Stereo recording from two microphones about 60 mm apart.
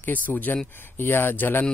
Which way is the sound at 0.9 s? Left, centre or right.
Left.